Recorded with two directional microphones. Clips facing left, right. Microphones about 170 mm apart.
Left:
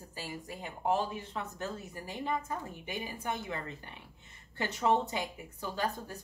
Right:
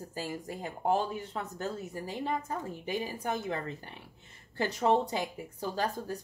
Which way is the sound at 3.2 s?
40° right (ahead or behind).